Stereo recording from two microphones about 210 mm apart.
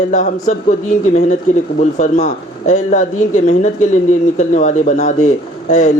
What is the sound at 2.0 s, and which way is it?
Speech, 35° left (ahead or behind).